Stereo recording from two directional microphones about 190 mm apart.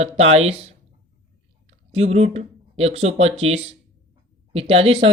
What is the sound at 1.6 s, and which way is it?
Speech, 35° right (ahead or behind).